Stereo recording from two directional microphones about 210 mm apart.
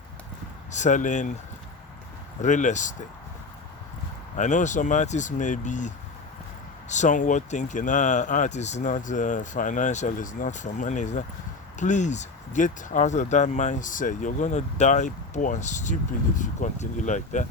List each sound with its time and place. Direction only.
0.7 s speech: 35° left (ahead or behind)
2.4 s speech: 35° left (ahead or behind)
4.4 s speech: 35° left (ahead or behind)